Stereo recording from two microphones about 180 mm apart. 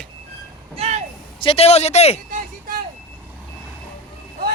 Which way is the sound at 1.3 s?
30° left (ahead or behind).